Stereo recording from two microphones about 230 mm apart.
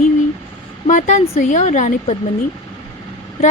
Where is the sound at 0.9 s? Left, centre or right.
Left.